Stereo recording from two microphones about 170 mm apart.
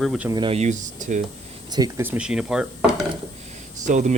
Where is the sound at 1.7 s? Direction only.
20° right (ahead or behind).